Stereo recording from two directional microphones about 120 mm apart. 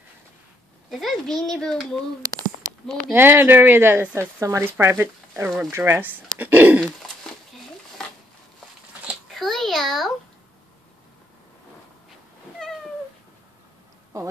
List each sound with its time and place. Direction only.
0.8 s speech: centre (ahead or behind)
3.1 s speech: 20° right (ahead or behind)
9.3 s a sound: centre (ahead or behind)